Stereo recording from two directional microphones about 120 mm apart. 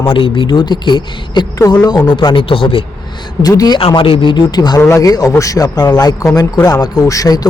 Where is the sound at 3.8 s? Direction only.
50° left (ahead or behind); by 7.5 s 30° left (ahead or behind).